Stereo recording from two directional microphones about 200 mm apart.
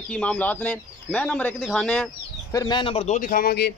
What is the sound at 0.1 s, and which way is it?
Speech, 5° left (ahead or behind).